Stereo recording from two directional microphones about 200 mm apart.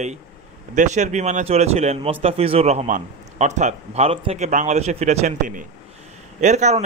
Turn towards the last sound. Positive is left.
turn(degrees=-35)  # may be behind; listen again after turning